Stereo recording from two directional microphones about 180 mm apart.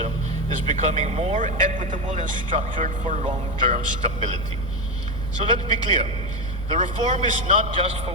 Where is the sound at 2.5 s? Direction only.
30° right (ahead or behind).